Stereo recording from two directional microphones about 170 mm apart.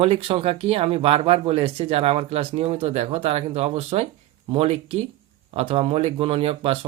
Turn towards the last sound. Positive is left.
turn(degrees=-35)  # may be behind; listen again after turning